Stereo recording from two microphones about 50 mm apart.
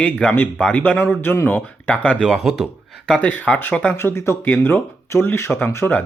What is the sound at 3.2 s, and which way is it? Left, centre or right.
Speech, left.